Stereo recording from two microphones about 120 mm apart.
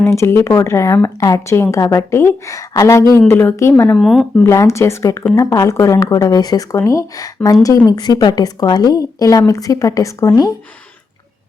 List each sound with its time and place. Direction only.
0.0 s speech: 25° left (ahead or behind)
3.9 s speech: centre (ahead or behind)
4.4 s a woman's voice: 25° left (ahead or behind)